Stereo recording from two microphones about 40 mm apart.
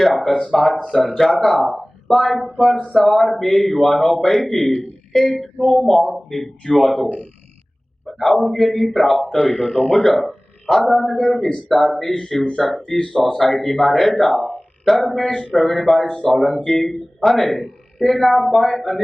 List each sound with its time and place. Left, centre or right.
0.3 s a man's voice: centre
1.1 s a man's voice: centre
8.0 s a sound: centre
8.5 s a man's voice: centre
13.0 s speech: centre
13.3 s a man's voice: centre
14.1 s speech: left
14.8 s a man's voice: centre